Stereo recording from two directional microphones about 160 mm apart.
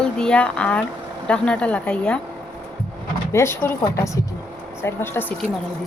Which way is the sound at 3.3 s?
15° left (ahead or behind).